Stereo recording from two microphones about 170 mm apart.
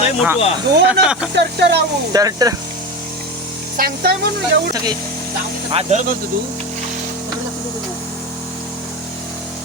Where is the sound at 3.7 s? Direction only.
60° right (ahead or behind).